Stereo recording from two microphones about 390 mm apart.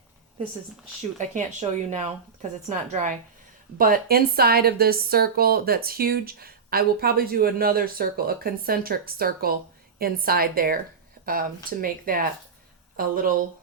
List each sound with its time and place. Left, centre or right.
1.9 s a woman's voice: centre